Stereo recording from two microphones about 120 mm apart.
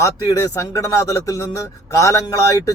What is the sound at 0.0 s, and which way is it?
A man's voice, 25° left (ahead or behind).